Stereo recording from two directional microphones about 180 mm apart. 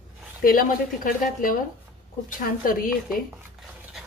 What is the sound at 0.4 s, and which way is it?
Speech, 50° left (ahead or behind).